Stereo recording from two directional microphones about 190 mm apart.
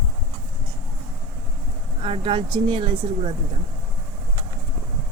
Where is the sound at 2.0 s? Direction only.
30° right (ahead or behind).